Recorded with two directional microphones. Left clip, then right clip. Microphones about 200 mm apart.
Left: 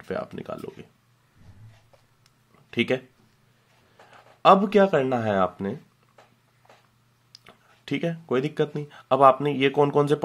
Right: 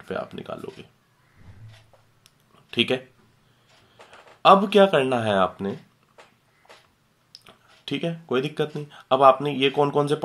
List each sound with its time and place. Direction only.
0.1 s speech: 25° left (ahead or behind)
2.2 s a sound: 20° left (ahead or behind)
4.4 s speech: 25° left (ahead or behind)
7.3 s speech: 25° left (ahead or behind)